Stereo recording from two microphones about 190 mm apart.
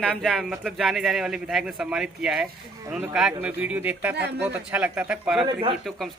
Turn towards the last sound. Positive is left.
turn(degrees=-25)  # may be behind; listen again after turning